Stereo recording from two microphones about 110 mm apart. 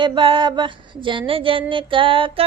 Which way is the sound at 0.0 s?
45° right (ahead or behind).